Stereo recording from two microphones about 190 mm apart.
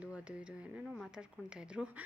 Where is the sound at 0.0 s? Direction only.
5° right (ahead or behind).